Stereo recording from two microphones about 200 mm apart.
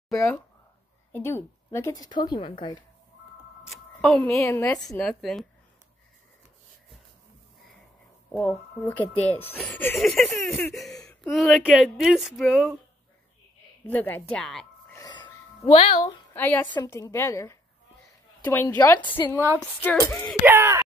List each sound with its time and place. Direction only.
0.1 s a woman's voice: 5° left (ahead or behind); by 2.8 s 25° left (ahead or behind)
4.0 s a woman's voice: 5° left (ahead or behind)
4.9 s speech: centre (ahead or behind)
8.3 s speech: 5° left (ahead or behind)
13.8 s a woman's voice: 10° left (ahead or behind)
15.0 s a sound: 20° left (ahead or behind)
16.0 s a woman's voice: 15° left (ahead or behind)
19.3 s groan: 10° right (ahead or behind)
19.6 s speech: 5° left (ahead or behind)
20.4 s groan: 10° right (ahead or behind)